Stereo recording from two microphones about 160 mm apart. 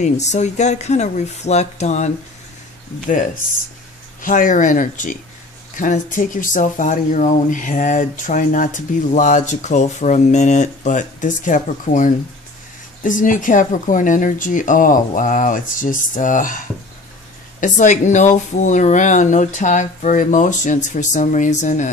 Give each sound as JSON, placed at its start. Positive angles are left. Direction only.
{"t": 0.0, "sound": "speech", "side_deg": 45}
{"t": 4.2, "sound": "speech", "side_deg": 55}